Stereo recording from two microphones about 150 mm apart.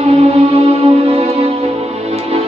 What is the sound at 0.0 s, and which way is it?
Music, 45° right (ahead or behind).